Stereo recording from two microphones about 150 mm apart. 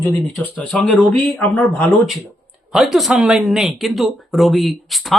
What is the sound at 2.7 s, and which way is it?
Speech, centre (ahead or behind).